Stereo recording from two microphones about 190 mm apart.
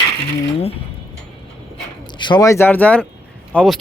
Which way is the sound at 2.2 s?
20° left (ahead or behind).